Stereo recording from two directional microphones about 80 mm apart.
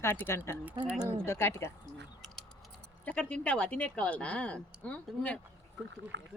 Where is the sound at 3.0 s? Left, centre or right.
Centre.